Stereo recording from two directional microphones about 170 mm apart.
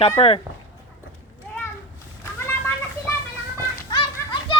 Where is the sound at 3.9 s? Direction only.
30° left (ahead or behind).